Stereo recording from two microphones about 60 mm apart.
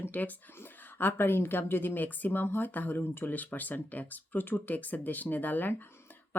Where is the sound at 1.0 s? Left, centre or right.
Left.